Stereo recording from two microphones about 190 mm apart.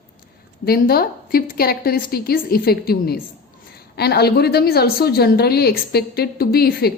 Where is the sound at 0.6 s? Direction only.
55° left (ahead or behind).